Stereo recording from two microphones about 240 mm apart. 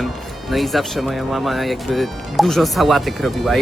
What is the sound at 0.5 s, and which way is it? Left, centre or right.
Speech, centre.